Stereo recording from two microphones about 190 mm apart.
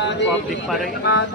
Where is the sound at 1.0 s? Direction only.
60° left (ahead or behind).